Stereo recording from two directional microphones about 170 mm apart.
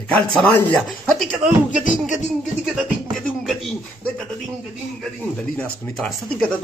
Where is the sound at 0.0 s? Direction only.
5° left (ahead or behind).